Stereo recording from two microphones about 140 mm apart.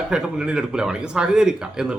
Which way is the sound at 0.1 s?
5° right (ahead or behind).